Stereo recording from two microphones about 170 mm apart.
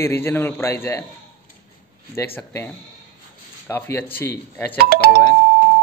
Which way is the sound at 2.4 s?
15° left (ahead or behind).